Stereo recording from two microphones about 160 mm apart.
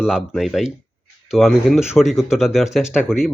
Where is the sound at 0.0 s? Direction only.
5° right (ahead or behind).